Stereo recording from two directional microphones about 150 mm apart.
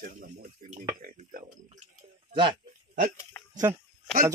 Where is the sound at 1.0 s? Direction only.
65° right (ahead or behind).